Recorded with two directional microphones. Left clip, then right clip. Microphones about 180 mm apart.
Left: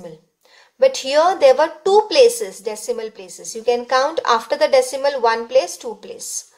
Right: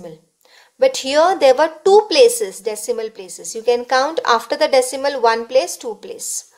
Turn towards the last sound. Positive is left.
turn(degrees=-30)  # may be behind; listen again after turning